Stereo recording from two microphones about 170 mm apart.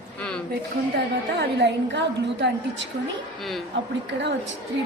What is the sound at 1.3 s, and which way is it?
A woman's voice, 90° right.